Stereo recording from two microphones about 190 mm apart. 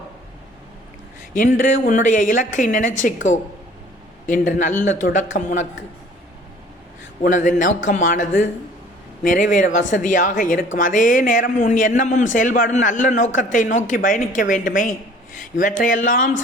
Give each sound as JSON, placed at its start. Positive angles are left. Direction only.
{"t": 1.3, "sound": "a woman's voice", "side_deg": 45}
{"t": 4.3, "sound": "a man's voice", "side_deg": 45}
{"t": 7.2, "sound": "a woman's voice", "side_deg": 40}